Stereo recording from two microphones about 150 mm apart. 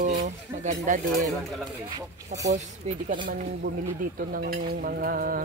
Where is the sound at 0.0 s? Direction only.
50° right (ahead or behind).